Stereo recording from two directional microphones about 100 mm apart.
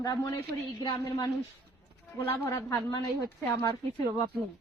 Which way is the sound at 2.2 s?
30° left (ahead or behind).